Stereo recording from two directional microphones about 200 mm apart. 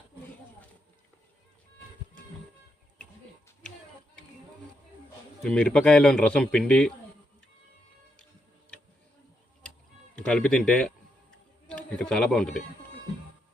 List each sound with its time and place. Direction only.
5.4 s a man's voice: 5° left (ahead or behind)
10.2 s a man's voice: 5° left (ahead or behind)